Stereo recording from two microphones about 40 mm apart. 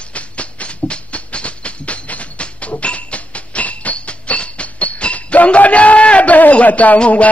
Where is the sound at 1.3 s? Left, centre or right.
Left.